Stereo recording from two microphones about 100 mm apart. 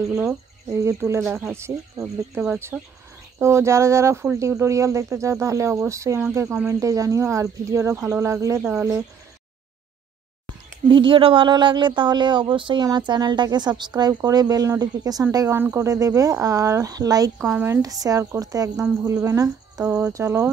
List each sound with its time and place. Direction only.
0.8 s speech: 30° right (ahead or behind)
2.7 s speech: 10° right (ahead or behind)
3.3 s speech: 25° right (ahead or behind)
10.9 s a woman's voice: 55° right (ahead or behind); by 15.2 s 40° right (ahead or behind)
15.3 s a woman's voice: 25° right (ahead or behind)
17.4 s a woman's voice: 25° right (ahead or behind)